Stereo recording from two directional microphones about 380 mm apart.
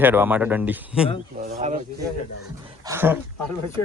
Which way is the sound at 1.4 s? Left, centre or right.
Centre.